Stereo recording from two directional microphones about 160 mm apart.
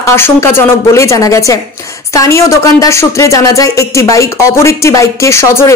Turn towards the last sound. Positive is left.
turn(degrees=15)  # may be behind; listen again after turning